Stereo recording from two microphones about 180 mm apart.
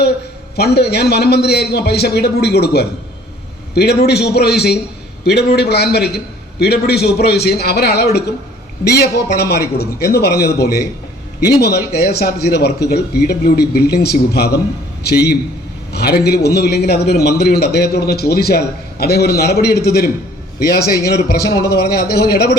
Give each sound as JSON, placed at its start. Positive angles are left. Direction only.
{"t": 0.5, "sound": "a man's voice", "side_deg": 65}
{"t": 11.9, "sound": "a man's voice", "side_deg": 65}
{"t": 15.9, "sound": "a man's voice", "side_deg": 60}